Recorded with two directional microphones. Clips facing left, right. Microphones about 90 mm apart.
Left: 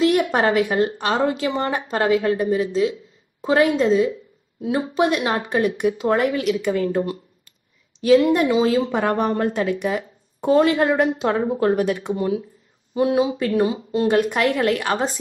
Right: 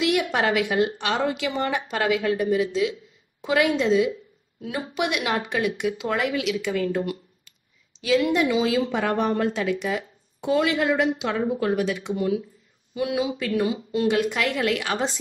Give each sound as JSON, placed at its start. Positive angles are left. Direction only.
{"t": 0.0, "sound": "a woman's voice", "side_deg": 40}
{"t": 8.0, "sound": "a woman's voice", "side_deg": 45}
{"t": 12.9, "sound": "a woman's voice", "side_deg": 35}
{"t": 14.1, "sound": "a woman's voice", "side_deg": 50}